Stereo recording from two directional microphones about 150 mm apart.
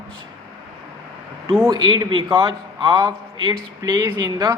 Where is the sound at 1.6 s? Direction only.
25° right (ahead or behind).